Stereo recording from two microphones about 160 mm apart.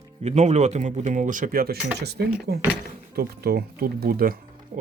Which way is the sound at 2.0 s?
90° right.